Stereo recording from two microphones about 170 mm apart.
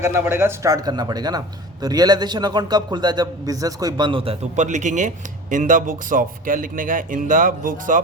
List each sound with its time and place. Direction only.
0.0 s a man's voice: 15° right (ahead or behind); by 8.0 s 50° right (ahead or behind)